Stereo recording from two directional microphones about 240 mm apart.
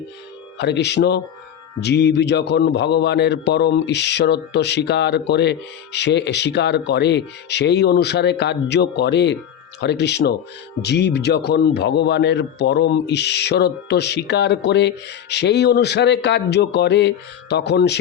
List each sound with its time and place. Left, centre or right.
0.6 s a man's voice: left